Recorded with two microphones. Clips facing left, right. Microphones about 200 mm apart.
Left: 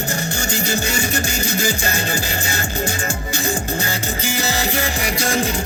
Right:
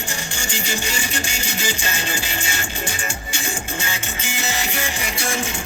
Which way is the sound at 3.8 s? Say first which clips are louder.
Left 6 dB; 35° left (ahead or behind).